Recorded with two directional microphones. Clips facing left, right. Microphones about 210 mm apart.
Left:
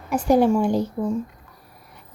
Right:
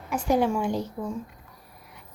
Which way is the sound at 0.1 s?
35° left (ahead or behind).